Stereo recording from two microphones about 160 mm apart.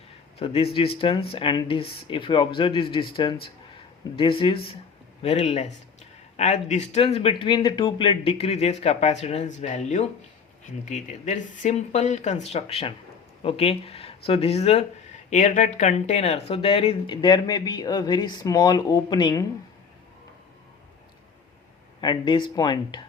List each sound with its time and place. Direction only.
0.3 s speech: 40° left (ahead or behind)
22.0 s speech: 30° left (ahead or behind)